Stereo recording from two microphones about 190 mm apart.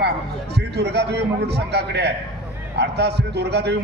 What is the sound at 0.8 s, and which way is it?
A man's voice, 60° right (ahead or behind).